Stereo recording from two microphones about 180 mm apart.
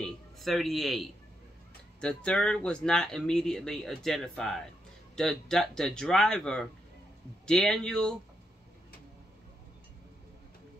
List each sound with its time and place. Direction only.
0.0 s a man's voice: centre (ahead or behind)